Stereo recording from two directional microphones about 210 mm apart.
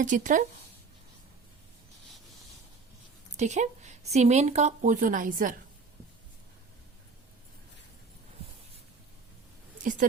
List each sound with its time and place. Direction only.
0.0 s a woman's voice: 35° right (ahead or behind)
3.3 s a woman's voice: 35° right (ahead or behind)
9.8 s a woman's voice: 40° right (ahead or behind)